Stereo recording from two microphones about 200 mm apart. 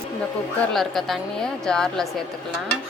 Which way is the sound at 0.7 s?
Centre (ahead or behind).